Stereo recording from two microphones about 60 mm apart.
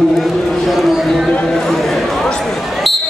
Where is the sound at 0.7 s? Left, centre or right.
Centre.